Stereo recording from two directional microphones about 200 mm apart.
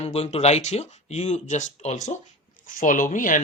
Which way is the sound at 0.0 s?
30° left (ahead or behind).